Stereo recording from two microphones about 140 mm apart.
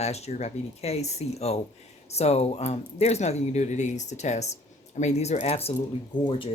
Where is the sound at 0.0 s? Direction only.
50° left (ahead or behind).